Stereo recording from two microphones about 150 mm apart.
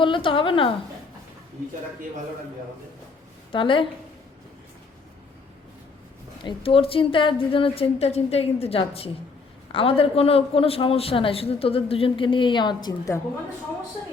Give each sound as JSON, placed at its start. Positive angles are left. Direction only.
{"t": 0.0, "sound": "speech", "side_deg": 35}
{"t": 3.5, "sound": "speech", "side_deg": 35}
{"t": 6.4, "sound": "speech", "side_deg": 40}